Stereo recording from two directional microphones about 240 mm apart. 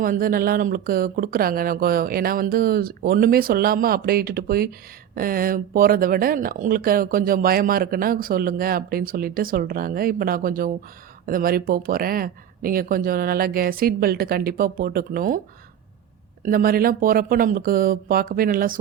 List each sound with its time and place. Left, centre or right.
0.0 s speech: right
16.4 s speech: right